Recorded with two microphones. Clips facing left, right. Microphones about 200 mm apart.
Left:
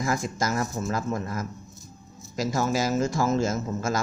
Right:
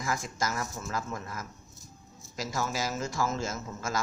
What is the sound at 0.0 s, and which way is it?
A man's voice, 40° left (ahead or behind).